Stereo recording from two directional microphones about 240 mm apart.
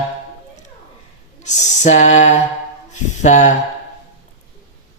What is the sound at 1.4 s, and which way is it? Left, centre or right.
Speech, left.